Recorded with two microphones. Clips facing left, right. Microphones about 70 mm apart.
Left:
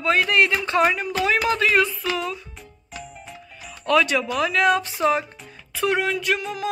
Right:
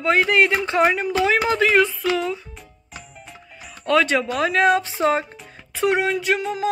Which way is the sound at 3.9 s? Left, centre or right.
Right.